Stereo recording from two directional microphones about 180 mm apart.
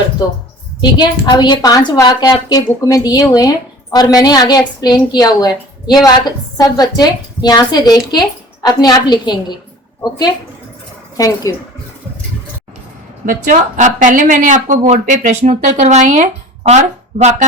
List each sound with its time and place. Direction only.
0.2 s a woman's voice: 20° left (ahead or behind)
11.5 s a woman's voice: 20° left (ahead or behind)
13.2 s a woman's voice: 45° right (ahead or behind)